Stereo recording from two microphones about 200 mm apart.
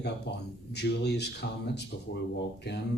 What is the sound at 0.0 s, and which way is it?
Speech, 55° left (ahead or behind).